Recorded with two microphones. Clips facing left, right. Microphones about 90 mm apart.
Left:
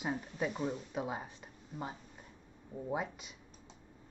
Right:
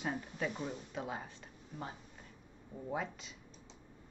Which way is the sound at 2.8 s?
15° left (ahead or behind).